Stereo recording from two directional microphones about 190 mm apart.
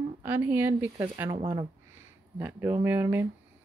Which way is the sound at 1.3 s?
25° right (ahead or behind).